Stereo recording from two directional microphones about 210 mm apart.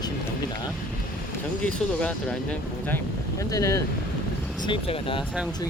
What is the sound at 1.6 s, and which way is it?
Speech, 5° left (ahead or behind).